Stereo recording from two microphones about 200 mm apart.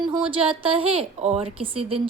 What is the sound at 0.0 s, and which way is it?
A woman's voice, 25° right (ahead or behind).